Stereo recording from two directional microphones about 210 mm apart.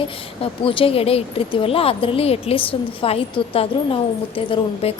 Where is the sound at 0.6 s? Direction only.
25° left (ahead or behind).